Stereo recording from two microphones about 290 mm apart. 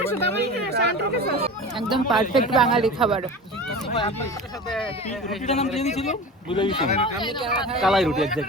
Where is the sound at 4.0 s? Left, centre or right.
Centre.